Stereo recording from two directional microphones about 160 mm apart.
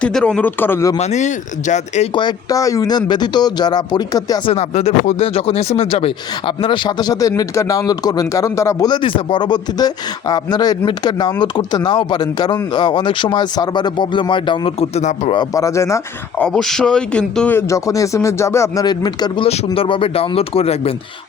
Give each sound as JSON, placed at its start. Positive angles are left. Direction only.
{"t": 0.0, "sound": "speech", "side_deg": 5}
{"t": 0.9, "sound": "speech", "side_deg": 45}
{"t": 2.1, "sound": "speech", "side_deg": 25}
{"t": 4.4, "sound": "speech", "side_deg": 40}
{"t": 15.4, "sound": "speech", "side_deg": 20}
{"t": 16.4, "sound": "speech", "side_deg": 5}